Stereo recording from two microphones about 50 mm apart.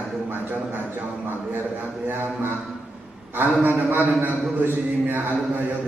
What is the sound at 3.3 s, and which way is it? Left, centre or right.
A man's voice, right.